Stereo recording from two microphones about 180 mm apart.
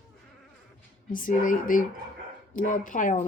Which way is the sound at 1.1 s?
50° left (ahead or behind).